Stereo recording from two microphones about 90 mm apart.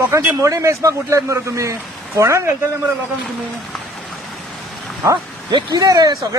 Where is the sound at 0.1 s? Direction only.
35° right (ahead or behind).